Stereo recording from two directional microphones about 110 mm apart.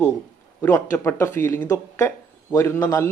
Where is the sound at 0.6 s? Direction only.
25° left (ahead or behind).